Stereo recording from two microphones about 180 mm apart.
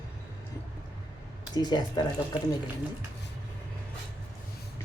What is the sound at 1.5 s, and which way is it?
Speech, 25° left (ahead or behind).